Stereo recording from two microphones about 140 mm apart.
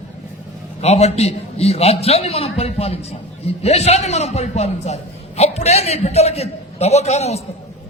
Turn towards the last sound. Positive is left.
turn(degrees=50)  # may be behind; listen again after turning